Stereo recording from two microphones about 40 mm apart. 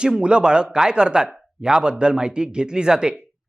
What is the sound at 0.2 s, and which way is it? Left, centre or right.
Speech, right.